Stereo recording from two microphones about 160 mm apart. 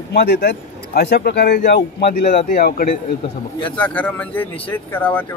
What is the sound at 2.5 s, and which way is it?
Speech, 65° left (ahead or behind).